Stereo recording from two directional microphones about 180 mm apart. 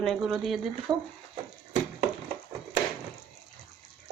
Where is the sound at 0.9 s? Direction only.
25° right (ahead or behind).